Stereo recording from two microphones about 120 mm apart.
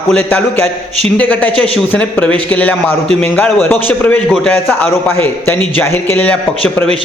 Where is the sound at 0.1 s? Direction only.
10° left (ahead or behind).